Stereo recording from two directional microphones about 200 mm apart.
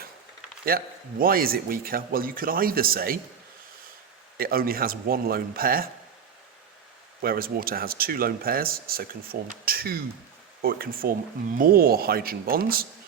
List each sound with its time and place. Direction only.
0.7 s speech: 45° right (ahead or behind)
4.4 s speech: 50° right (ahead or behind)
7.2 s speech: 50° right (ahead or behind)